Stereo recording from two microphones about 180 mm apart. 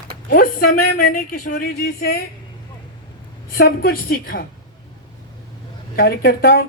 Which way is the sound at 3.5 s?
55° left (ahead or behind).